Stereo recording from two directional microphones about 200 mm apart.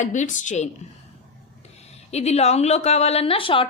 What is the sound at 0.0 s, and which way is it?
A woman's voice, 35° left (ahead or behind).